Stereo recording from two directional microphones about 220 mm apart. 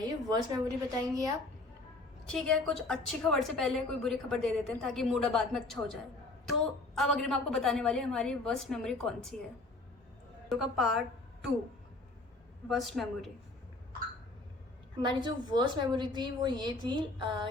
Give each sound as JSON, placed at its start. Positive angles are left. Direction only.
{"t": 0.0, "sound": "a woman's voice", "side_deg": -15}
{"t": 2.2, "sound": "a woman's voice", "side_deg": 0}
{"t": 10.5, "sound": "a woman's voice", "side_deg": 0}
{"t": 12.6, "sound": "a woman's voice", "side_deg": 0}
{"t": 15.0, "sound": "a woman's voice", "side_deg": -20}